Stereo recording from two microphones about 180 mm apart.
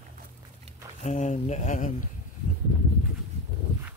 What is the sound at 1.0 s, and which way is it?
Speech, 40° left (ahead or behind).